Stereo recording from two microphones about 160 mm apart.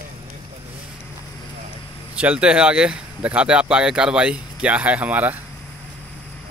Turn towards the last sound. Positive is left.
turn(degrees=-10)  # may be behind; listen again after turning